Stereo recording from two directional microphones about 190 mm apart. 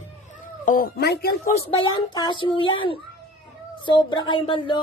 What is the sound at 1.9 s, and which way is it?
Speech, 25° left (ahead or behind).